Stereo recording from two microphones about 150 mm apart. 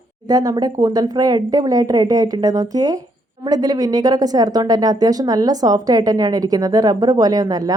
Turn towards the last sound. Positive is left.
turn(degrees=-25)  # may be behind; listen again after turning